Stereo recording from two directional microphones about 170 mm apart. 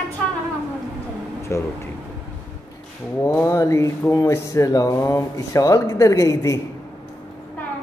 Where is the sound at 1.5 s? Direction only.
15° left (ahead or behind).